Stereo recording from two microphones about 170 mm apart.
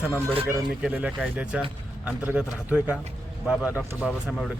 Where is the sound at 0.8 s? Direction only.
5° right (ahead or behind).